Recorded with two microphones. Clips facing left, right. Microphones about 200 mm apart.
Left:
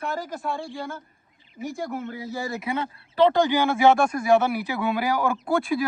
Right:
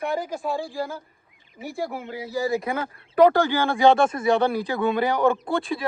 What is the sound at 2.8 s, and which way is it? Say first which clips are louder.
Speech: right 3 dB; 30° left (ahead or behind).